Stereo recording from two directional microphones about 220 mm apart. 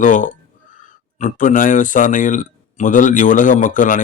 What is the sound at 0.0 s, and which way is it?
A man's voice, 35° left (ahead or behind).